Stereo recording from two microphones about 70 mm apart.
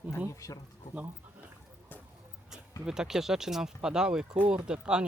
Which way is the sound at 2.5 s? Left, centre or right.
Centre.